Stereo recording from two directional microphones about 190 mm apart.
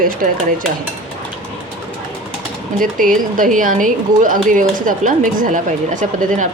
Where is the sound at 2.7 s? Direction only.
45° right (ahead or behind).